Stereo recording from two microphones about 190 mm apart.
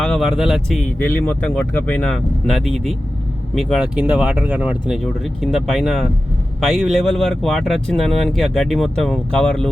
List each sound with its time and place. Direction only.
0.0 s speech: centre (ahead or behind)